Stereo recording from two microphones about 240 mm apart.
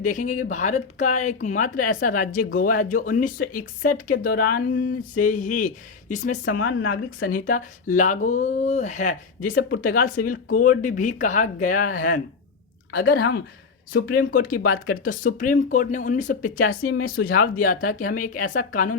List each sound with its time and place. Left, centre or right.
0.0 s speech: left
6.6 s speech: left
7.2 s speech: left
13.9 s speech: left